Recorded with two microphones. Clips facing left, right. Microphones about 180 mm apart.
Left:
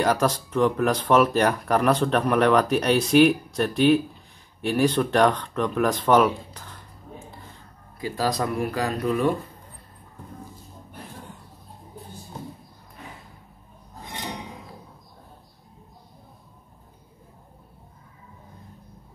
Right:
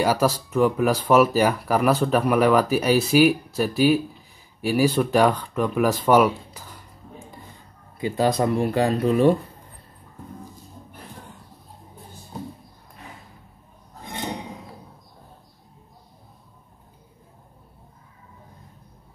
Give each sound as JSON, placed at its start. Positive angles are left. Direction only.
{"t": 0.0, "sound": "speech", "side_deg": -5}
{"t": 8.0, "sound": "speech", "side_deg": -25}